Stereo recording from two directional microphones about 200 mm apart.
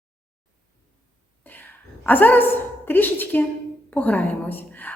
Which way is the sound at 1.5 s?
10° left (ahead or behind).